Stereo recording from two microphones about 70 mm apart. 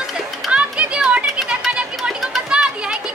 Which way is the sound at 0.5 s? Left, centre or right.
Centre.